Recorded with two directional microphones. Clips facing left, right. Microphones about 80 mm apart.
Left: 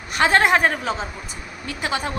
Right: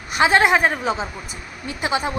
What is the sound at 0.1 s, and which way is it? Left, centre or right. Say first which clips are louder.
A woman's voice: right 1 dB; centre.